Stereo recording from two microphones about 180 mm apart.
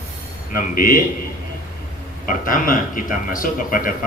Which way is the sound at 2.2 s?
50° left (ahead or behind).